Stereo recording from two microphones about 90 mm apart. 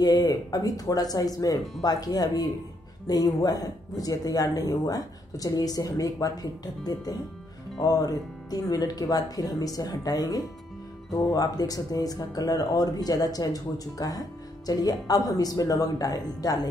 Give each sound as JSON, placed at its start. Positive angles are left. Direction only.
{"t": 0.0, "sound": "speech", "side_deg": 45}